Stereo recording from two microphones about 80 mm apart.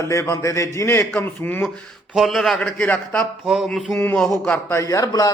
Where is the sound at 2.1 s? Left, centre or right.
Centre.